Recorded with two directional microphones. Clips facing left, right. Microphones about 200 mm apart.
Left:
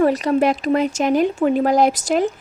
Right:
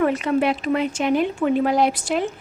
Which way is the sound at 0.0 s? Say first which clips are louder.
Left 3 dB; 40° left (ahead or behind).